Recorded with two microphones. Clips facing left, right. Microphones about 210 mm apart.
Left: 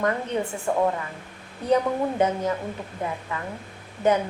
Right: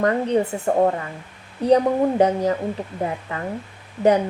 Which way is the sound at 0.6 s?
40° right (ahead or behind).